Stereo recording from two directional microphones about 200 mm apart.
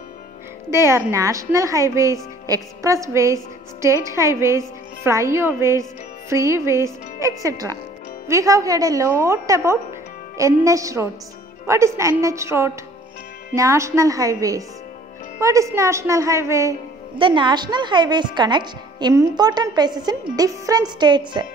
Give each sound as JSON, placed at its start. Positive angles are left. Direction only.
{"t": 0.7, "sound": "a woman's voice", "side_deg": -15}